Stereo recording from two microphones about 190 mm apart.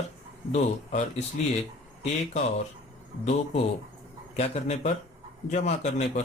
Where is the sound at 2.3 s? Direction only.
35° left (ahead or behind).